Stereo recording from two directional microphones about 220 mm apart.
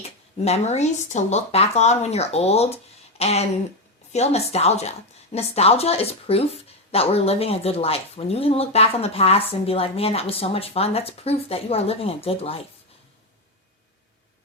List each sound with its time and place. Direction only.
0.0 s speech: 30° left (ahead or behind)